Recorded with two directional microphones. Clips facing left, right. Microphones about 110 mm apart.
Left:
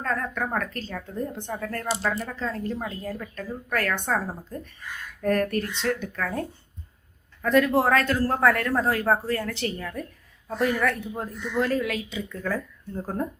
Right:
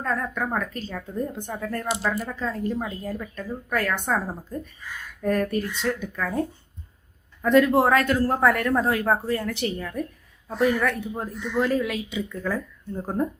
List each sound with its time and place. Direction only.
0.0 s speech: 10° right (ahead or behind)
5.2 s speech: 10° right (ahead or behind)
7.4 s speech: 20° right (ahead or behind)